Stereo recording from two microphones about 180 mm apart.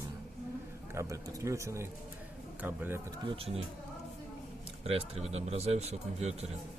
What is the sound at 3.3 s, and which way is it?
Speech, 30° right (ahead or behind).